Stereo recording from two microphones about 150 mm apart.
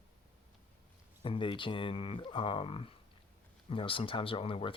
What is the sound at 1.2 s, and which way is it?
Speech, 35° left (ahead or behind).